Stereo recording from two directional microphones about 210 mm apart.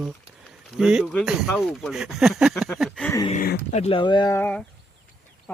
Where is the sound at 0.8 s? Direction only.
Centre (ahead or behind).